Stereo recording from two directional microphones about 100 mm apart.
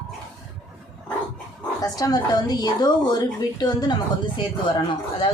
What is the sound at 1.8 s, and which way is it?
A woman's voice, 40° left (ahead or behind).